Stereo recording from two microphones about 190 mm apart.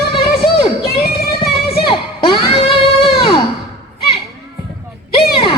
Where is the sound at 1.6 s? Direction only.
55° left (ahead or behind).